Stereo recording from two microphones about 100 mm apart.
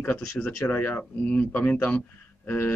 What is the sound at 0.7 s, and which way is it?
Speech, 15° left (ahead or behind).